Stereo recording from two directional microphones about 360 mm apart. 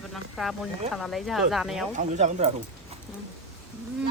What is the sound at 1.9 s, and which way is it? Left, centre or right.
Speech, centre.